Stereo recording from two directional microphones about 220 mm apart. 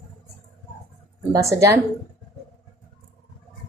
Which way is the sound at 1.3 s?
15° right (ahead or behind).